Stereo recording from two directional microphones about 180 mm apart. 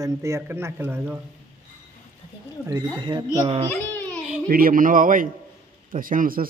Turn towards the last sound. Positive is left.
turn(degrees=-50)  # may be behind; listen again after turning